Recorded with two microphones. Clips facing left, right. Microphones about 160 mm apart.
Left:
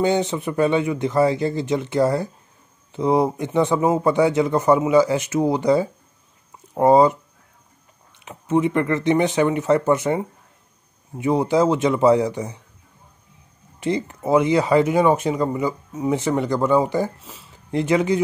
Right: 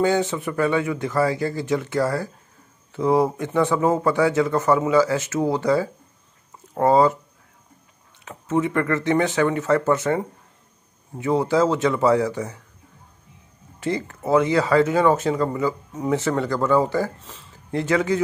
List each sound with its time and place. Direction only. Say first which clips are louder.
0.0 s speech: left 1 dB; 20° left (ahead or behind)
8.3 s speech: left 3 dB; 15° left (ahead or behind)
13.7 s speech: left 2 dB; 20° left (ahead or behind)